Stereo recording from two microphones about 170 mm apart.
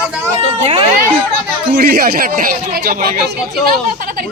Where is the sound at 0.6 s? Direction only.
30° right (ahead or behind).